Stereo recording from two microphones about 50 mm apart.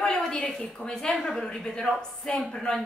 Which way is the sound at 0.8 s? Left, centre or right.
Centre.